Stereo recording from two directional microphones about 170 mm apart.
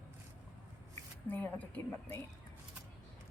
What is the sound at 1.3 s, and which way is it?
Speech, 10° left (ahead or behind).